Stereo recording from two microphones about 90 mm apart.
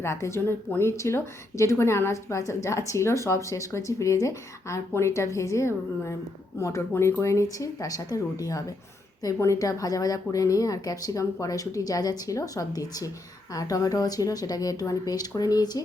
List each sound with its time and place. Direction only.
0.0 s a woman's voice: 30° left (ahead or behind); by 15.8 s 50° left (ahead or behind)